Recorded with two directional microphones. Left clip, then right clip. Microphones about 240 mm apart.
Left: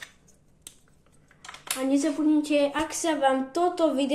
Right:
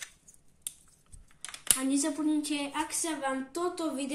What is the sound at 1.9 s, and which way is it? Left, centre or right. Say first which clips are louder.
A woman's voice: left 8 dB; right.